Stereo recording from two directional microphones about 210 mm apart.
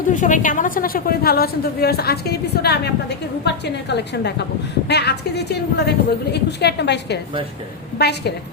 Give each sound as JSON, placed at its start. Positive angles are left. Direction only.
{"t": 0.1, "sound": "a woman's voice", "side_deg": 35}